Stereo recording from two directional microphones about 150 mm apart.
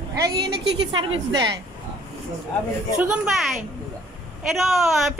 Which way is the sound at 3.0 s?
10° right (ahead or behind).